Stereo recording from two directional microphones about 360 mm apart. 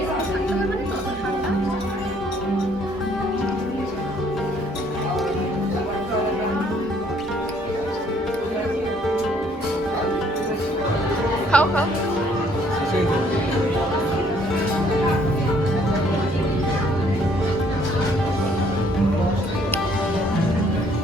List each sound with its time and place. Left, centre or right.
11.5 s music: centre